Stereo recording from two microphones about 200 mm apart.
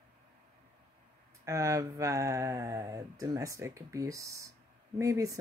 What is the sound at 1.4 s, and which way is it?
Speech, 15° right (ahead or behind).